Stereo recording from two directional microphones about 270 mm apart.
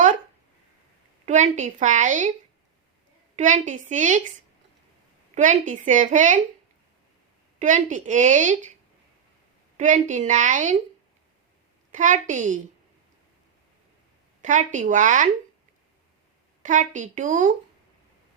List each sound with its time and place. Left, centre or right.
1.2 s a woman's voice: right
3.3 s a woman's voice: right
5.3 s a woman's voice: right
7.6 s a woman's voice: right
9.7 s a woman's voice: right
11.9 s a woman's voice: right
14.4 s a woman's voice: right
16.6 s a woman's voice: right